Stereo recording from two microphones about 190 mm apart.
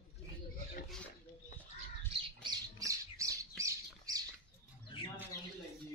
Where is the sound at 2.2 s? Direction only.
20° right (ahead or behind).